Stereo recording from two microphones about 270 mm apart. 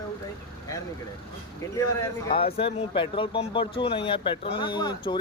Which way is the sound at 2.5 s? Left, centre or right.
Left.